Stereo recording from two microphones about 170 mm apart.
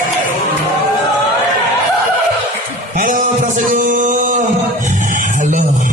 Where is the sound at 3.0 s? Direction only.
50° right (ahead or behind).